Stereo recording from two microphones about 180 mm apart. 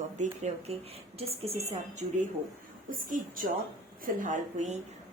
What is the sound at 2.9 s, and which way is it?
A woman's voice, 50° right (ahead or behind).